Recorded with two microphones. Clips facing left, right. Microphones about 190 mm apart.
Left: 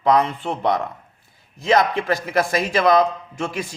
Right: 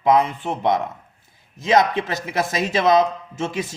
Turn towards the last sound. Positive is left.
turn(degrees=-25)  # may be behind; listen again after turning